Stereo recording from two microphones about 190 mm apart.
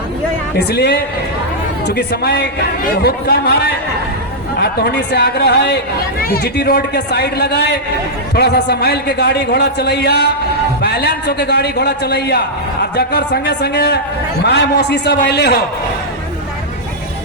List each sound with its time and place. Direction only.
0.7 s a man's voice: 60° left (ahead or behind)